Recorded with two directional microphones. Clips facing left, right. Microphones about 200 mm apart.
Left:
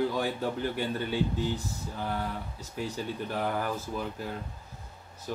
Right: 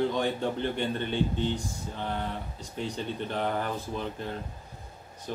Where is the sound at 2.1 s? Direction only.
25° right (ahead or behind).